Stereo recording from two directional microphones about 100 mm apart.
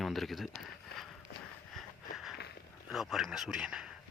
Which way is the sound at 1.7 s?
Centre (ahead or behind).